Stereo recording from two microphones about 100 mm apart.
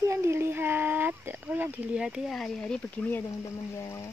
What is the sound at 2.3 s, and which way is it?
Speech, 5° left (ahead or behind).